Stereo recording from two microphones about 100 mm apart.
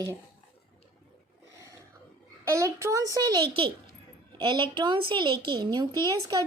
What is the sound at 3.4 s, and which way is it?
A woman's voice, 60° right (ahead or behind).